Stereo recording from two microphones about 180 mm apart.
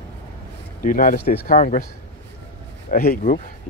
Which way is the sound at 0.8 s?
50° left (ahead or behind).